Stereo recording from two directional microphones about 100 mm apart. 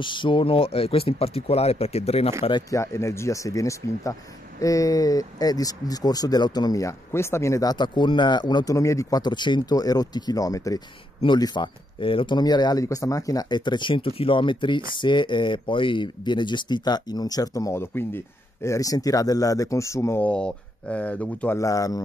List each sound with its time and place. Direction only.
0.0 s speech: 55° left (ahead or behind); by 2.3 s 90° left
2.7 s speech: 30° left (ahead or behind)
7.7 s speech: 50° left (ahead or behind)
8.7 s speech: 30° left (ahead or behind)
9.2 s speech: 50° left (ahead or behind)
11.2 s speech: 45° left (ahead or behind); by 20.2 s 30° left (ahead or behind)
20.2 s speech: 10° left (ahead or behind)
21.5 s speech: 35° left (ahead or behind)